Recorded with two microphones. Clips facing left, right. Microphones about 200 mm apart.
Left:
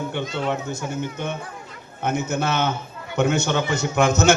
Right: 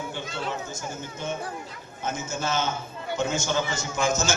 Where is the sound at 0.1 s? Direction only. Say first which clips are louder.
Left 7 dB; 65° left (ahead or behind).